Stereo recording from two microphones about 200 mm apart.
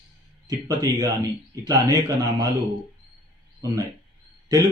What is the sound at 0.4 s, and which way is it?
A man's voice, 20° right (ahead or behind).